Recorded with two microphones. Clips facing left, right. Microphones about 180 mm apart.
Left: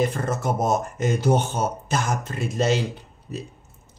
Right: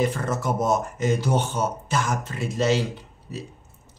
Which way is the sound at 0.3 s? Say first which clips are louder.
Even; 50° left (ahead or behind).